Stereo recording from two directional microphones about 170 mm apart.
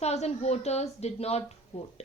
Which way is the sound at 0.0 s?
40° left (ahead or behind).